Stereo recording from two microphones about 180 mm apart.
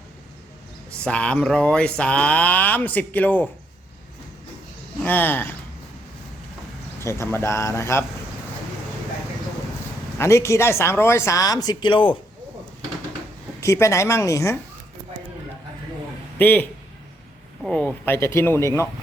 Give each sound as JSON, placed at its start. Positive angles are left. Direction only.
{"t": 0.9, "sound": "speech", "side_deg": 5}
{"t": 5.0, "sound": "speech", "side_deg": 10}
{"t": 7.0, "sound": "speech", "side_deg": 15}
{"t": 10.2, "sound": "speech", "side_deg": 15}
{"t": 13.6, "sound": "speech", "side_deg": 15}
{"t": 16.4, "sound": "speech", "side_deg": 10}